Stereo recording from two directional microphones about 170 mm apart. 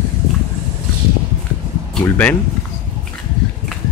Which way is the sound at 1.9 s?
10° left (ahead or behind).